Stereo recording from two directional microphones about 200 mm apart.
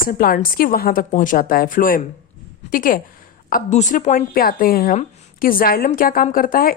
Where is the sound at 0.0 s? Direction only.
45° left (ahead or behind).